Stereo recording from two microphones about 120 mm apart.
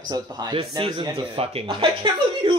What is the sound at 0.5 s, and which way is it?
Speech, 45° right (ahead or behind).